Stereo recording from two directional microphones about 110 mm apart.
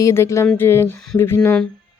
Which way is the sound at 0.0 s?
25° left (ahead or behind).